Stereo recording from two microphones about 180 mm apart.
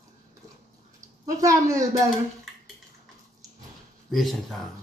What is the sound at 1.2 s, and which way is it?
Speech, 15° right (ahead or behind).